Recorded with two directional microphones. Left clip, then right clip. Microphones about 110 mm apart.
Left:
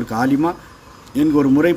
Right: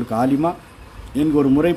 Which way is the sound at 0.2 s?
10° right (ahead or behind).